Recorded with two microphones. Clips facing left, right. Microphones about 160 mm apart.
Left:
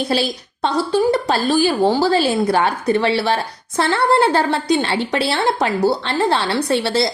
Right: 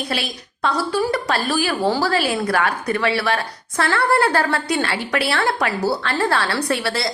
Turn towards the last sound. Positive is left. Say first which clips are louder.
# left 4 dB
turn(degrees=25)  # may be behind; listen again after turning